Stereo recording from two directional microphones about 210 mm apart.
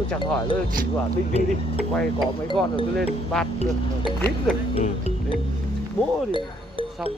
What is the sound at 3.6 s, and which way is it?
Speech, 25° left (ahead or behind).